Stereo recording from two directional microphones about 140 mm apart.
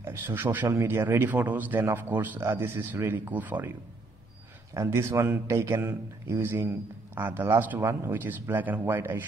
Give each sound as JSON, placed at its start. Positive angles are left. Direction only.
{"t": 0.0, "sound": "speech", "side_deg": -15}
{"t": 4.7, "sound": "a man's voice", "side_deg": -20}